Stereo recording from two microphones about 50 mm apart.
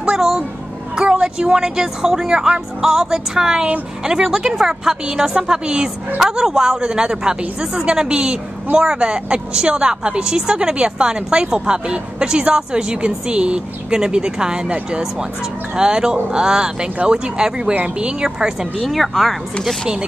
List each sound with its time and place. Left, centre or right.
0.0 s speech: centre
0.9 s a woman's voice: right
2.8 s a woman's voice: centre
18.9 s speech: centre